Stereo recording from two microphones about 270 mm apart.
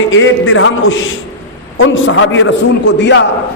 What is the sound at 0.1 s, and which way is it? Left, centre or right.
A man's voice, left.